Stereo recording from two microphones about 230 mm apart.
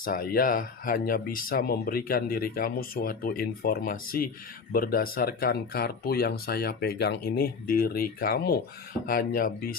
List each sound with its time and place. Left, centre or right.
0.0 s speech: left